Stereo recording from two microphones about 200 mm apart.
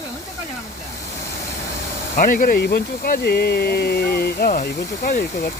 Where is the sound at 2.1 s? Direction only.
45° left (ahead or behind).